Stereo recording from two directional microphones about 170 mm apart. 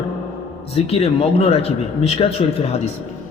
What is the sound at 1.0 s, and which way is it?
A man's voice, 35° left (ahead or behind).